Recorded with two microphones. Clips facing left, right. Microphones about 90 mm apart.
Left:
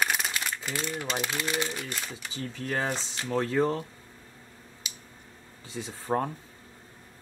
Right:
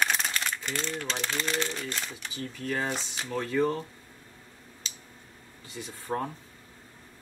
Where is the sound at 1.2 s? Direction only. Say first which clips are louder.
Even; 10° left (ahead or behind).